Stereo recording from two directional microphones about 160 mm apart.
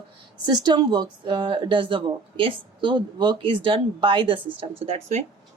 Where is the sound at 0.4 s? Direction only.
25° right (ahead or behind).